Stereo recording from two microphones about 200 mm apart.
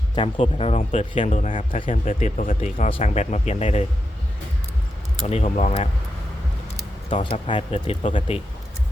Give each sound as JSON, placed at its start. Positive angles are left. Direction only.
{"t": 0.2, "sound": "speech", "side_deg": 25}
{"t": 5.2, "sound": "speech", "side_deg": 35}
{"t": 7.1, "sound": "speech", "side_deg": 25}